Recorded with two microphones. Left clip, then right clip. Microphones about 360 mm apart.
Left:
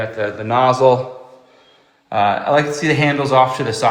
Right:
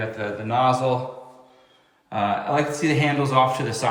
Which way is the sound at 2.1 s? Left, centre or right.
Centre.